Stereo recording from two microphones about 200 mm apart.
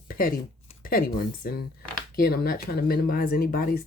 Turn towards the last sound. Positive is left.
turn(degrees=45)  # may be behind; listen again after turning